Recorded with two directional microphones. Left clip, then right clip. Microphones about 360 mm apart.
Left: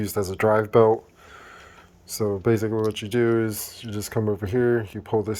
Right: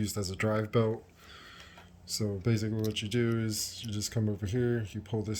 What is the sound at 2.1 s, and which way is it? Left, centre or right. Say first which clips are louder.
Speech: left 11 dB; centre.